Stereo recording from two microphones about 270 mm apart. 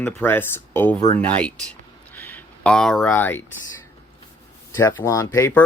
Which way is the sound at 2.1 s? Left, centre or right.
Centre.